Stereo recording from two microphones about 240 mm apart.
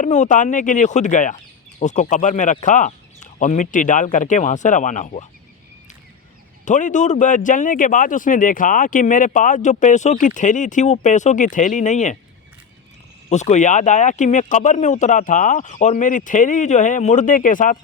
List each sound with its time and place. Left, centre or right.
0.0 s speech: left
6.7 s speech: left
13.3 s speech: left